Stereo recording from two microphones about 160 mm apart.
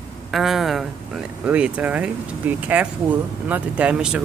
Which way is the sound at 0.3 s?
Centre (ahead or behind).